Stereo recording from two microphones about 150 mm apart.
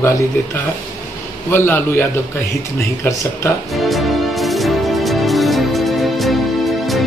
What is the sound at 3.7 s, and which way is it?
Music, centre (ahead or behind).